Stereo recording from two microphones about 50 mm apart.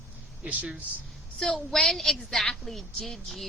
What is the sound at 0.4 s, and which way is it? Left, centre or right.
Speech, right.